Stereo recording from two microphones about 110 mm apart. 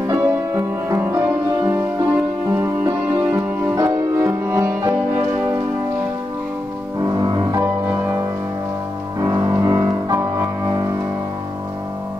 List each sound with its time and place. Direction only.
0.1 s music: 25° right (ahead or behind)
7.0 s music: 30° right (ahead or behind)